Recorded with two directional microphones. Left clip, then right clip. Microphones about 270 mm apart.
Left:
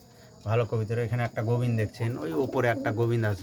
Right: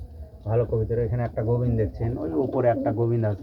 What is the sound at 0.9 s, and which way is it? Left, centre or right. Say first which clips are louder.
Speech: right 4 dB; centre.